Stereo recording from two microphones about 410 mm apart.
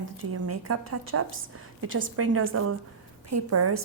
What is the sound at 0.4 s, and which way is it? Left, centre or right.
A woman's voice, right.